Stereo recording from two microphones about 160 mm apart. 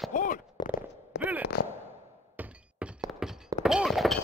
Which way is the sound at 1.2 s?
10° right (ahead or behind).